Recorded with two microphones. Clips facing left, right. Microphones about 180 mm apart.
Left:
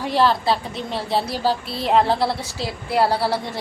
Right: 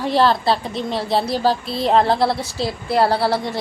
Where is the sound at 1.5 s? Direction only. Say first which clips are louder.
Right 1 dB; 10° left (ahead or behind).